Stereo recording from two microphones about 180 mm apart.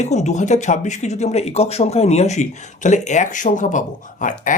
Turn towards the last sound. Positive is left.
turn(degrees=45)  # may be behind; listen again after turning